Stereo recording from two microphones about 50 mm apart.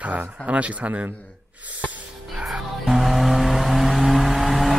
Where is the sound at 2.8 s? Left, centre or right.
Centre.